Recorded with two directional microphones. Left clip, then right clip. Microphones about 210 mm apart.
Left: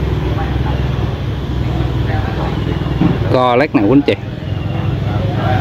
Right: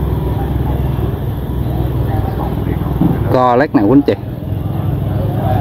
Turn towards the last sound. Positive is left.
turn(degrees=5)  # may be behind; listen again after turning